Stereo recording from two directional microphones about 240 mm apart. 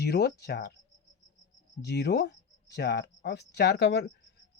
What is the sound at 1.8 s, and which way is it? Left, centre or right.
Speech, left.